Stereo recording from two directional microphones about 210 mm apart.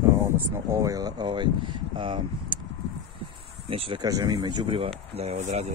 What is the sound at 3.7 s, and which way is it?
Speech, 25° right (ahead or behind).